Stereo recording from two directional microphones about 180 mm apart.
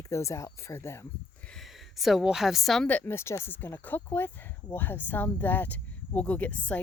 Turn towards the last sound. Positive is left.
turn(degrees=10)  # may be behind; listen again after turning